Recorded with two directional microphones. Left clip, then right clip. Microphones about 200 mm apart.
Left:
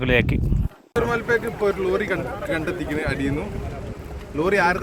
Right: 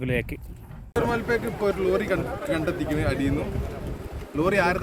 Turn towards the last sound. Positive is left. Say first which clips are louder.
# left 3 dB
turn(degrees=-10)  # may be behind; listen again after turning